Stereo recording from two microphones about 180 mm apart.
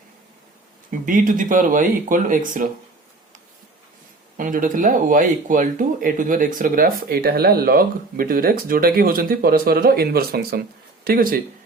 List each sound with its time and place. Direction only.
0.9 s speech: 50° right (ahead or behind)
4.4 s speech: 50° right (ahead or behind)